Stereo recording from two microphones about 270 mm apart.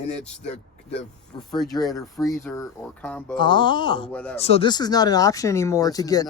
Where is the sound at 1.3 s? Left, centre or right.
Centre.